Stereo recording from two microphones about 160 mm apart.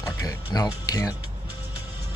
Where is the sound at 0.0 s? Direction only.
20° left (ahead or behind).